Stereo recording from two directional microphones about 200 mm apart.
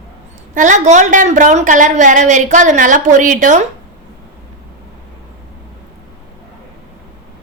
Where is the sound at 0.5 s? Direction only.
40° right (ahead or behind).